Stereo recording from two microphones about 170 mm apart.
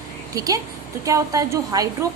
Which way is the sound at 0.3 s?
20° right (ahead or behind).